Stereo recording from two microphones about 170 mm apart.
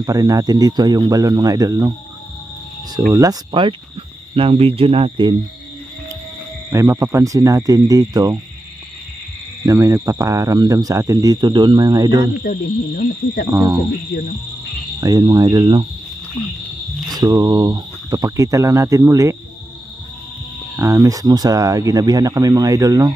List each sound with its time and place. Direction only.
0.0 s speech: 20° right (ahead or behind)
3.1 s speech: 20° right (ahead or behind)
6.7 s speech: 20° right (ahead or behind)
9.7 s speech: 20° right (ahead or behind)
12.4 s speech: 65° left (ahead or behind)
13.5 s speech: 15° right (ahead or behind)
15.0 s speech: 20° right (ahead or behind)
17.1 s speech: 20° right (ahead or behind)
20.7 s speech: 15° right (ahead or behind)